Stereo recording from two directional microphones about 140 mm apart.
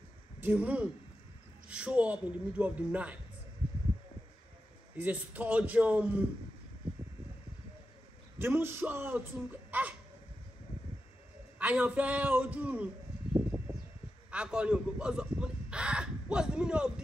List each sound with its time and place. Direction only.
0.4 s a man's voice: 10° right (ahead or behind)
4.9 s a man's voice: 10° right (ahead or behind)
8.4 s a man's voice: 15° right (ahead or behind)
11.5 s a sound: 10° right (ahead or behind)
14.3 s speech: 5° right (ahead or behind)